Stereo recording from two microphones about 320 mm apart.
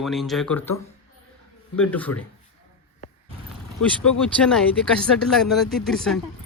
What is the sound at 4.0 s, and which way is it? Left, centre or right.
Speech, centre.